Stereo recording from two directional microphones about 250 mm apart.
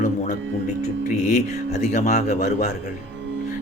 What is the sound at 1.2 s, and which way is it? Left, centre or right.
Speech, left.